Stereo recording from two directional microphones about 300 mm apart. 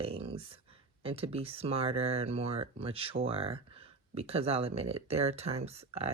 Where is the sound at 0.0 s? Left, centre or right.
Centre.